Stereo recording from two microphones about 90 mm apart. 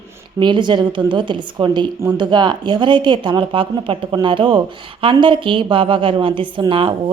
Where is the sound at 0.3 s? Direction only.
60° right (ahead or behind); by 4.1 s 80° right.